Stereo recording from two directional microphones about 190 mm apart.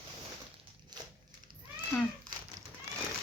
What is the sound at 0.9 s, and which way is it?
Crushing, 20° right (ahead or behind).